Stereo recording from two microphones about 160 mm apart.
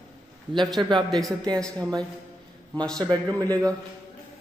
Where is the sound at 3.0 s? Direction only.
25° right (ahead or behind).